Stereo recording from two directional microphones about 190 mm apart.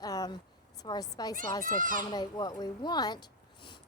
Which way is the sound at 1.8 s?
45° right (ahead or behind).